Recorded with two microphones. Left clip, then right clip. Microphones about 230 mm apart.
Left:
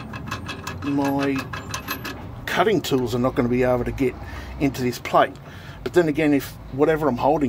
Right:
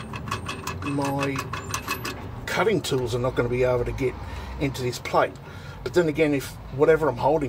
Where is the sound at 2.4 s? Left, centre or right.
Left.